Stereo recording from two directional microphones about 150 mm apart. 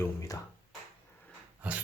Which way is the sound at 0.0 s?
25° left (ahead or behind).